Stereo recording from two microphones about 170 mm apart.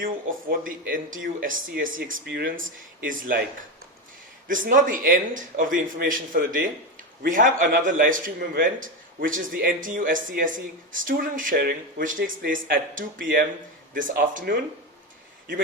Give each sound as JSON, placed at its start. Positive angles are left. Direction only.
{"t": 0.6, "sound": "speech", "side_deg": -55}
{"t": 4.4, "sound": "a man's voice", "side_deg": -50}